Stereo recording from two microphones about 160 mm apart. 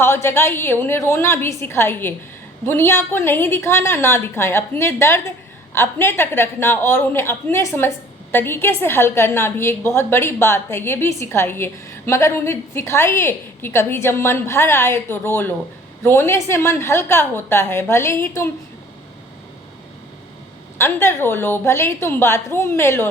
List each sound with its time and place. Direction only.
0.0 s a woman's voice: 15° left (ahead or behind)
20.7 s a woman's voice: 15° left (ahead or behind)